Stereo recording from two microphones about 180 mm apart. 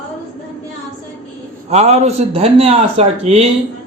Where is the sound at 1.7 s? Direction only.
40° right (ahead or behind).